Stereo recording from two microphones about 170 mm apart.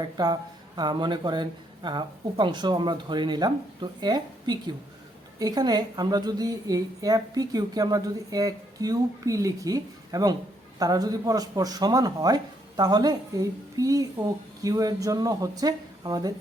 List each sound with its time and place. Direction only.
0.0 s speech: 25° right (ahead or behind)